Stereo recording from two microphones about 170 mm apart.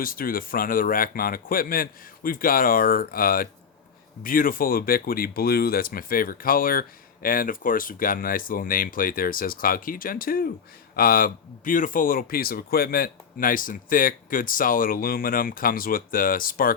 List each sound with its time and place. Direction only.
0.0 s speech: 55° left (ahead or behind)